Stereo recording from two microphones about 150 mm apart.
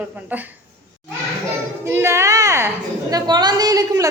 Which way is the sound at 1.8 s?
20° right (ahead or behind).